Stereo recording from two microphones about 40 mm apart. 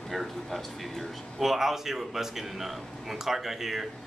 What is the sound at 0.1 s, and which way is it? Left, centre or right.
Speech, centre.